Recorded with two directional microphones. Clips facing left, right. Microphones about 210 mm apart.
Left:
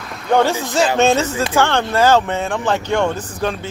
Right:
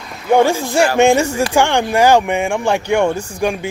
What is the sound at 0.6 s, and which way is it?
Speech, 10° right (ahead or behind).